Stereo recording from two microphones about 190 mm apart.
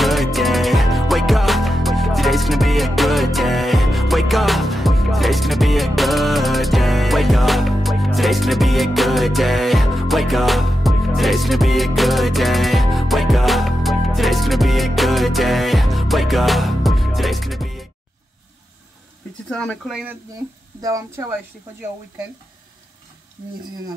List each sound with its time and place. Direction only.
0.0 s music: centre (ahead or behind)
19.5 s speech: 5° left (ahead or behind)
20.8 s speech: 15° right (ahead or behind)